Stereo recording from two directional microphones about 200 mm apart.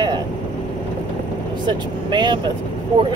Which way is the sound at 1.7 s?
20° right (ahead or behind).